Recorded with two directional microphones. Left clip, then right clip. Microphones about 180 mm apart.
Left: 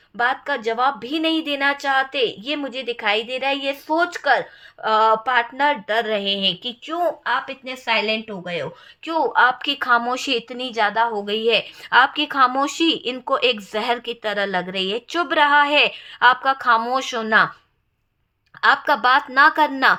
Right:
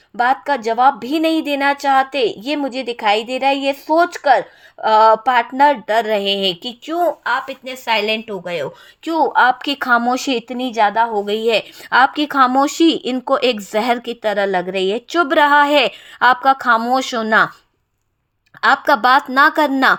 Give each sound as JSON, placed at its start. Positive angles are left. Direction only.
{"t": 0.2, "sound": "speech", "side_deg": -40}
{"t": 18.6, "sound": "speech", "side_deg": -40}